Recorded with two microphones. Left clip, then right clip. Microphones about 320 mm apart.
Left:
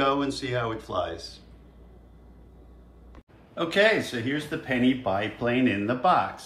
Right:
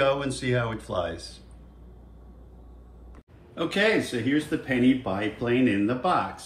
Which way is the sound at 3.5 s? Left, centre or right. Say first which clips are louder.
Left 2 dB; centre.